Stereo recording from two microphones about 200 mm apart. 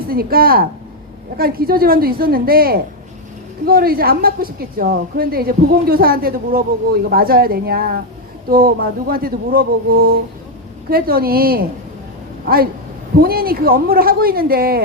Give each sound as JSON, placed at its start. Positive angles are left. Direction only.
{"t": 0.1, "sound": "a woman's voice", "side_deg": -50}
{"t": 13.2, "sound": "a woman's voice", "side_deg": -50}